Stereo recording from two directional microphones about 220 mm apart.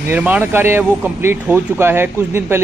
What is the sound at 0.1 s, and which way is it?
Speech, 10° right (ahead or behind).